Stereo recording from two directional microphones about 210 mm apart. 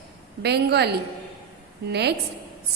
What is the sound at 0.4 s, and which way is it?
Speech, 50° right (ahead or behind).